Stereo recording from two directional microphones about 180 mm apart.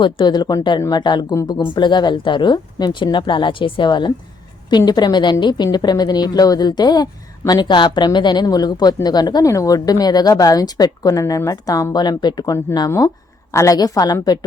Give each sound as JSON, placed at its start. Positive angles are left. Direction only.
{"t": 0.0, "sound": "a woman's voice", "side_deg": 25}